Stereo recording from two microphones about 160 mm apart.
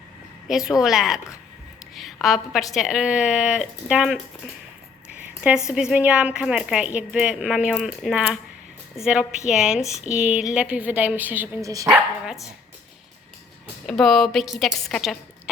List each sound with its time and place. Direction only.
0.4 s speech: 5° right (ahead or behind)
2.2 s speech: centre (ahead or behind)
5.0 s a sound: 10° right (ahead or behind)
5.6 s speech: 5° right (ahead or behind); by 11.9 s 20° right (ahead or behind)
11.9 s speech: 5° right (ahead or behind)
13.8 s speech: centre (ahead or behind)